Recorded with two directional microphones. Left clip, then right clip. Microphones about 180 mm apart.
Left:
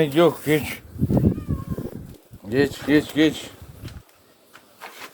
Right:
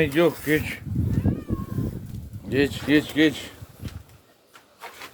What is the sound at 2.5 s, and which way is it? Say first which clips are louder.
Speech: left 2 dB; 5° left (ahead or behind).